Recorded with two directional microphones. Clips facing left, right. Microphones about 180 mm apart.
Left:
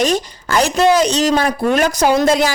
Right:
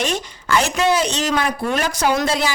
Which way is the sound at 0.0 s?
40° left (ahead or behind).